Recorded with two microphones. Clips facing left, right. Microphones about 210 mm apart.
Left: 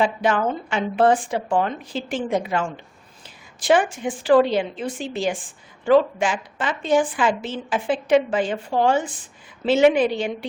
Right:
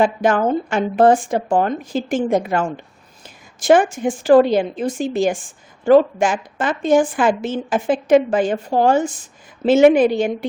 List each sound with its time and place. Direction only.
0.0 s a woman's voice: 45° right (ahead or behind)